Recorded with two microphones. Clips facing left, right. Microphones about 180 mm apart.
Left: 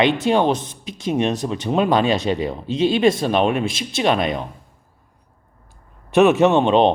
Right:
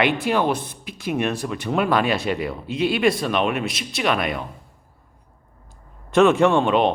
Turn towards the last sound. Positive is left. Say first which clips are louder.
# left 3 dB
turn(degrees=25)  # may be behind; listen again after turning